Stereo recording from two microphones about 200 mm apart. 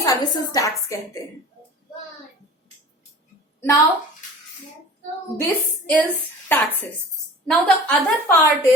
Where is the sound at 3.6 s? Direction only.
15° left (ahead or behind).